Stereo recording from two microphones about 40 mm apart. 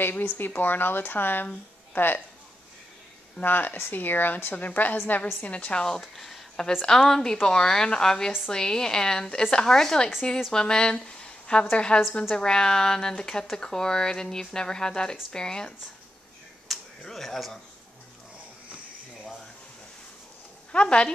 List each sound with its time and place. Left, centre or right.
0.6 s speech: left
3.4 s a woman's voice: left
3.7 s speech: left
4.6 s a woman's voice: left
5.4 s a woman's voice: left
5.9 s a woman's voice: centre
16.7 s a sound: centre
17.1 s speech: centre
20.7 s speech: left